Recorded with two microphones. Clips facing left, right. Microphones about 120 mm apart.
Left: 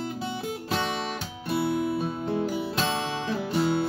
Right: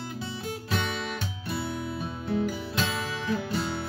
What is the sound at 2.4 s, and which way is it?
Music, 30° left (ahead or behind).